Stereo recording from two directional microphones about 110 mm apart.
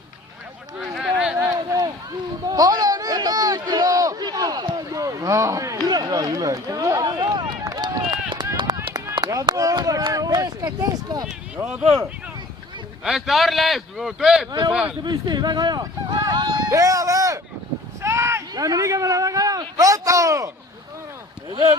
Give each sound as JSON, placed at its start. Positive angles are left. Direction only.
{"t": 0.8, "sound": "a sound", "side_deg": -5}
{"t": 1.5, "sound": "run", "side_deg": -35}
{"t": 2.5, "sound": "a sound", "side_deg": -35}
{"t": 7.6, "sound": "run", "side_deg": -35}
{"t": 9.1, "sound": "speech", "side_deg": -35}
{"t": 11.3, "sound": "speech", "side_deg": -10}
{"t": 13.1, "sound": "speech", "side_deg": 0}
{"t": 15.0, "sound": "speech", "side_deg": -40}
{"t": 16.2, "sound": "a sound", "side_deg": -40}
{"t": 18.5, "sound": "speech", "side_deg": -35}